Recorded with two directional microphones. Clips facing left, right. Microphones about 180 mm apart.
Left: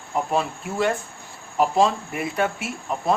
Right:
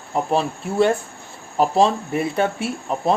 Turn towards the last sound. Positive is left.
turn(degrees=-30)  # may be behind; listen again after turning